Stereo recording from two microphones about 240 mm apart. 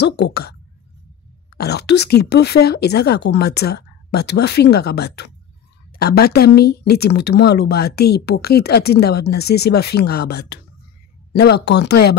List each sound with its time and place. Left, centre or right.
0.0 s speech: left
1.6 s speech: left